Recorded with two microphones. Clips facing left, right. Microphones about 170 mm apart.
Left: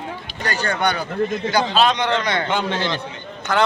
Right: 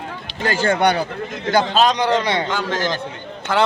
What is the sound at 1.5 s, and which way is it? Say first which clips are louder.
Speech: right 5 dB; 50° right (ahead or behind).